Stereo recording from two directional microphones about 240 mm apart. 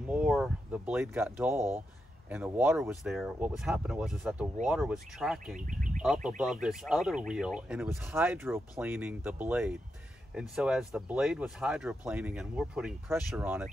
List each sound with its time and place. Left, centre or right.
0.1 s speech: centre
5.7 s bird: right
6.0 s speech: centre